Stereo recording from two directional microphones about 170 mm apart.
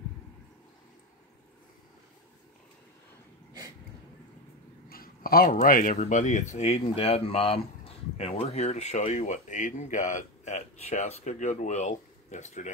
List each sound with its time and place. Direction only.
4.8 s speech: 60° left (ahead or behind); by 12.7 s 45° left (ahead or behind)